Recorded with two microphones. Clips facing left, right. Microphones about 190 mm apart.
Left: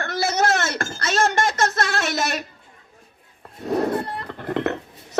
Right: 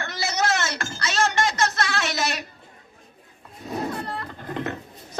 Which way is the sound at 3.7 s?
65° left (ahead or behind).